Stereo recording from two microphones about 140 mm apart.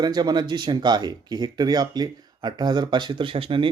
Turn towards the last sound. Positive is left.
turn(degrees=-35)  # may be behind; listen again after turning